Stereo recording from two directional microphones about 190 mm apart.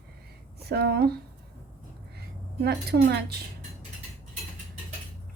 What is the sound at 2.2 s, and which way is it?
A woman's voice, 60° right (ahead or behind).